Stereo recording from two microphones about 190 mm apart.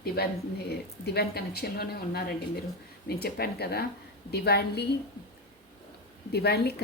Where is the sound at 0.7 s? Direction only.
60° left (ahead or behind).